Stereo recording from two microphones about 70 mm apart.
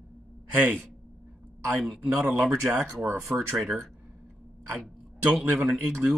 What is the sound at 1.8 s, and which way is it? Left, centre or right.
Speech, centre.